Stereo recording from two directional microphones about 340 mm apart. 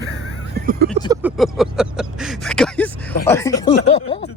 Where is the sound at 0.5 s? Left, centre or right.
Right.